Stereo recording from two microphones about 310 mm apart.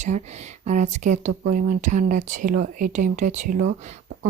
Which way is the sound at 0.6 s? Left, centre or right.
Right.